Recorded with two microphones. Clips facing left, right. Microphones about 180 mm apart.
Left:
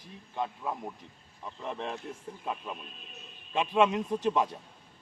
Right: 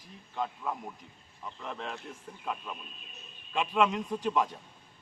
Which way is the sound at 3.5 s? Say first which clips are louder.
Left 2 dB; 25° left (ahead or behind).